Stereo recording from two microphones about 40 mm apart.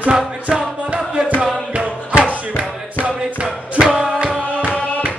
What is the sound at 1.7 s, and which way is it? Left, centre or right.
Music, right.